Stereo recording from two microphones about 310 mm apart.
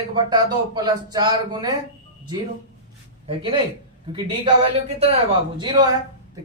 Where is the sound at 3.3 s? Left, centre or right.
Centre.